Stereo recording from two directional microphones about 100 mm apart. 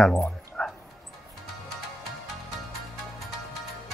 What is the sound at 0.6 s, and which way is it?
Music, 5° left (ahead or behind).